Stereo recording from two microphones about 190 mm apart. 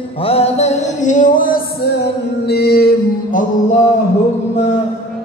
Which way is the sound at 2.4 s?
55° left (ahead or behind).